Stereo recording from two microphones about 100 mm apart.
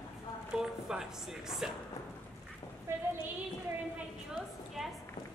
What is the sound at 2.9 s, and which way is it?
Speech, 25° right (ahead or behind).